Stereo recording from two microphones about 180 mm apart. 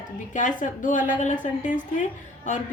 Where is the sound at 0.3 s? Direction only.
45° left (ahead or behind).